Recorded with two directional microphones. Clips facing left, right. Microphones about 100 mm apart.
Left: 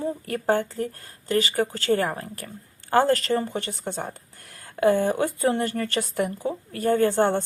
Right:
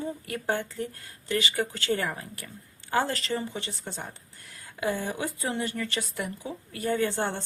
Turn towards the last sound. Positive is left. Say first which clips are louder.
# left 7 dB
turn(degrees=50)  # may be behind; listen again after turning